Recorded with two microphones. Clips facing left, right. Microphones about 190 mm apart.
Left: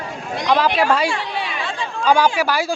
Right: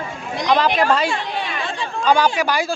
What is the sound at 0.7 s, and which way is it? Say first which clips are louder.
Speech: even; 10° left (ahead or behind).